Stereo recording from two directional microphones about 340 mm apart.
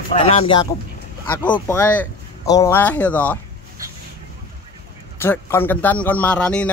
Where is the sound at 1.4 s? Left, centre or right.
Centre.